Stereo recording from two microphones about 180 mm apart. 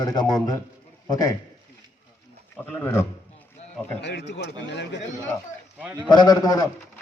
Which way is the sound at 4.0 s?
75° left (ahead or behind).